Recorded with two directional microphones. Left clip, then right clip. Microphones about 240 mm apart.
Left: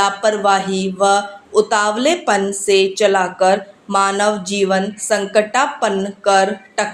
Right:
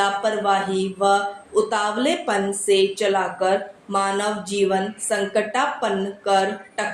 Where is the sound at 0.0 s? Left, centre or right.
Left.